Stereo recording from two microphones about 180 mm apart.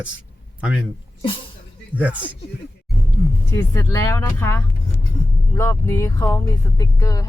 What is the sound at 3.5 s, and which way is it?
Speech, 15° left (ahead or behind).